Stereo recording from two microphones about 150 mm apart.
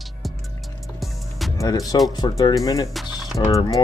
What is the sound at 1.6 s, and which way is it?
Speech, 25° left (ahead or behind).